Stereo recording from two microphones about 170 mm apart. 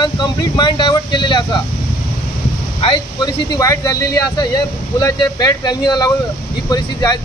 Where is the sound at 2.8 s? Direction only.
25° left (ahead or behind).